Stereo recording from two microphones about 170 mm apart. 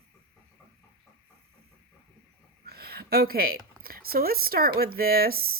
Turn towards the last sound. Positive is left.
turn(degrees=-60)  # may be behind; listen again after turning